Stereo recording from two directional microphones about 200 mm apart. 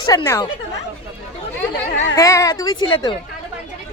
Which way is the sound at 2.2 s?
15° left (ahead or behind).